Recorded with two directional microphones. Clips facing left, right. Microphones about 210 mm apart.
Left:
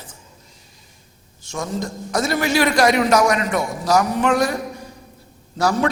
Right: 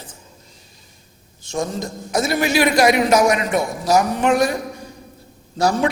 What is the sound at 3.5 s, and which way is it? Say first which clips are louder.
Speech: right 1 dB; 10° right (ahead or behind).